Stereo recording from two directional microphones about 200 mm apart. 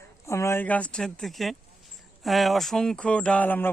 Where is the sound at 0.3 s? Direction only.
15° left (ahead or behind).